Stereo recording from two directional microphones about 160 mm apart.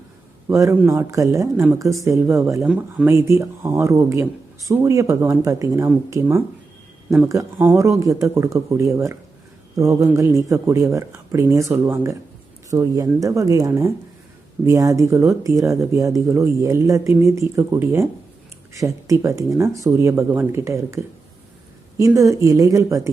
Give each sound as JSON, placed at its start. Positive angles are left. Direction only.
{"t": 0.4, "sound": "speech", "side_deg": -20}